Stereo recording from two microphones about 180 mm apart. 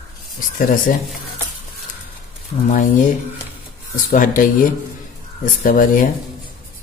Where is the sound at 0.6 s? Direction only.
50° left (ahead or behind).